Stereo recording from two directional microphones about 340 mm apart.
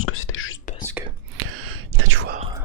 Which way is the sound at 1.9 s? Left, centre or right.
Right.